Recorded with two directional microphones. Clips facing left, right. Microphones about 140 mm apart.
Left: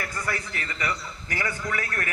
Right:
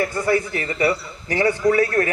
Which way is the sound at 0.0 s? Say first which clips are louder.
Right 12 dB; 25° right (ahead or behind).